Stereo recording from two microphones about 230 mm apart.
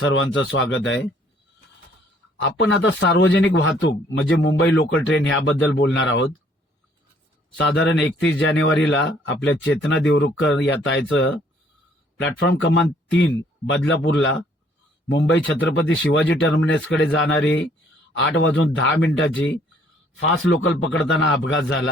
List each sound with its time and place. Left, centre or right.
0.0 s a man's voice: left
2.4 s a man's voice: left
7.6 s a man's voice: left